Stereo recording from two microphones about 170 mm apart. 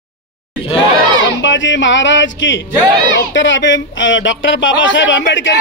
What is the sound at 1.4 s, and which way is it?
Speech, 90° left.